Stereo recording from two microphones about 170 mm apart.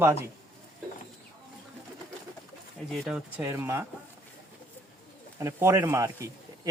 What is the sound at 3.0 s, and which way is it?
Speech, 5° right (ahead or behind).